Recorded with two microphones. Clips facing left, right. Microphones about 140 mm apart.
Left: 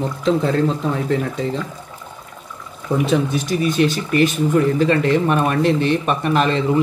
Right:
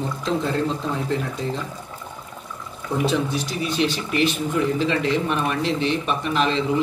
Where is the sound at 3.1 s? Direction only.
50° left (ahead or behind).